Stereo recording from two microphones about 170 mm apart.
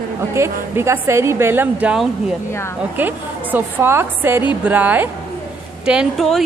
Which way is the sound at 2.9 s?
10° right (ahead or behind).